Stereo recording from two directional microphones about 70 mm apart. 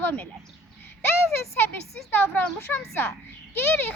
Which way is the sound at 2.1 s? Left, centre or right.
Left.